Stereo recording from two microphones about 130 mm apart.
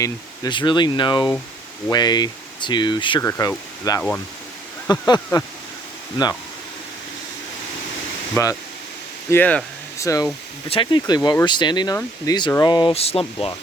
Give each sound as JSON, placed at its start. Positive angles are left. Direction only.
{"t": 0.0, "sound": "speech", "side_deg": 35}
{"t": 3.2, "sound": "speech", "side_deg": 20}
{"t": 8.4, "sound": "speech", "side_deg": 20}
{"t": 9.3, "sound": "speech", "side_deg": 10}
{"t": 10.0, "sound": "speech", "side_deg": 25}
{"t": 10.7, "sound": "speech", "side_deg": 40}
{"t": 12.9, "sound": "speech", "side_deg": 50}